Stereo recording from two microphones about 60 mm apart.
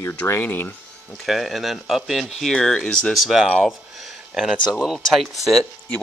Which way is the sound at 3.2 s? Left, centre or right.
Centre.